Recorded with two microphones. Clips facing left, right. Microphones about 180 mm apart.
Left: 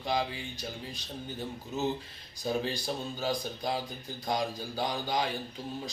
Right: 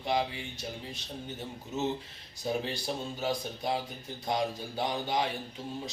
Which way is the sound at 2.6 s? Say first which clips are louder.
Left 1 dB; 25° right (ahead or behind).